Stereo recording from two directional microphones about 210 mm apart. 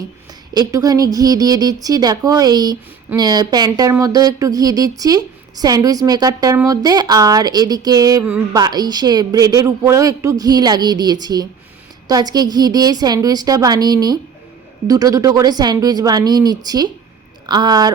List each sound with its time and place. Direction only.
0.5 s a woman's voice: 15° right (ahead or behind)